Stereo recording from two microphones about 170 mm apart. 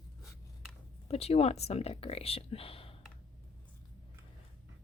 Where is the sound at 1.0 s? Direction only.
35° left (ahead or behind).